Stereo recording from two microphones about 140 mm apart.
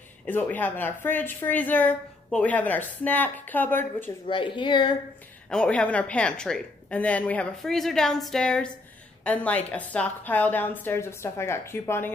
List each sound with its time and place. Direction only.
0.3 s a woman's voice: 10° left (ahead or behind)
4.3 s speech: 35° left (ahead or behind)
5.5 s a woman's voice: 10° left (ahead or behind)